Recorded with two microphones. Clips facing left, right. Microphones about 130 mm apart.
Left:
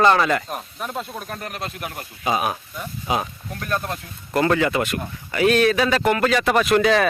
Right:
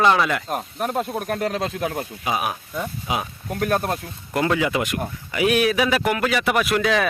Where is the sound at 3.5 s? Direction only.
65° right (ahead or behind).